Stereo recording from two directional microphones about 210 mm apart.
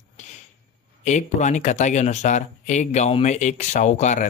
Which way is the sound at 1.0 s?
35° left (ahead or behind).